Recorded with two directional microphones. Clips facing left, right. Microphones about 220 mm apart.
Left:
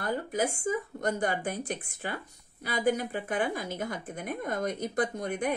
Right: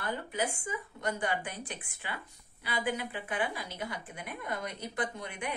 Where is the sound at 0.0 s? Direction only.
40° left (ahead or behind).